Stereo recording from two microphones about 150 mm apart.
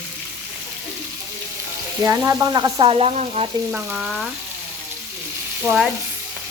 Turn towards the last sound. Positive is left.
turn(degrees=-5)  # may be behind; listen again after turning